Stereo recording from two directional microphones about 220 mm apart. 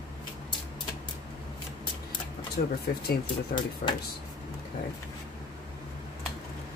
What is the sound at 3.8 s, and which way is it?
Speech, 40° left (ahead or behind).